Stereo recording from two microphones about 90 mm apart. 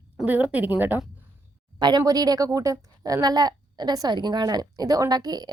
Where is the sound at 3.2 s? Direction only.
50° right (ahead or behind).